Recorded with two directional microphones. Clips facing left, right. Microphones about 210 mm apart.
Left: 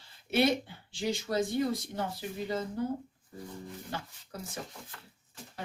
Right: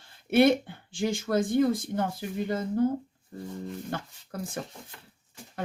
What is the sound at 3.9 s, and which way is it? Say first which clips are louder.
Speech: right 3 dB; 55° right (ahead or behind).